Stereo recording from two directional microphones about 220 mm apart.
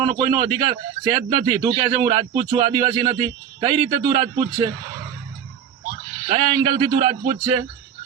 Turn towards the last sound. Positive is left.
turn(degrees=-25)  # may be behind; listen again after turning